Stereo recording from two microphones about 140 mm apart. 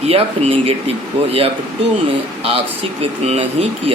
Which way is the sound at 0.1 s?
45° right (ahead or behind).